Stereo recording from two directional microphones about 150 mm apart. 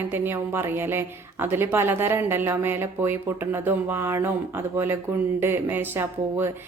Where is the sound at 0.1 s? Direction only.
15° right (ahead or behind).